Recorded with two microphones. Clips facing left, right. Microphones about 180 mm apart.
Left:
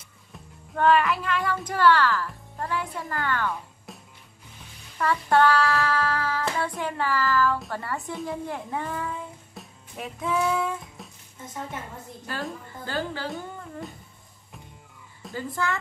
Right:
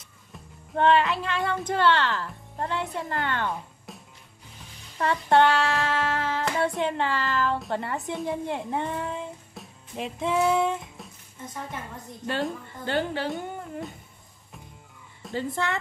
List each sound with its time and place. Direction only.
0.7 s speech: 25° right (ahead or behind)
3.9 s music: centre (ahead or behind)
4.9 s hands: 25° right (ahead or behind)
6.8 s speech: 25° right (ahead or behind)
8.0 s speech: centre (ahead or behind)
8.3 s speech: 25° right (ahead or behind)
9.6 s music: centre (ahead or behind)
9.9 s speech: 25° right (ahead or behind)
11.0 s music: centre (ahead or behind)
12.8 s speech: 25° right (ahead or behind)
15.3 s speech: 25° right (ahead or behind)